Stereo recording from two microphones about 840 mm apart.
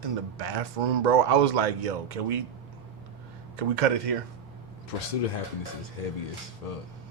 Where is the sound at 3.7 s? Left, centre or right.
Right.